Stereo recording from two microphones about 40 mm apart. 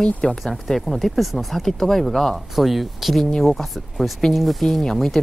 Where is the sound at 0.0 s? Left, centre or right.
Centre.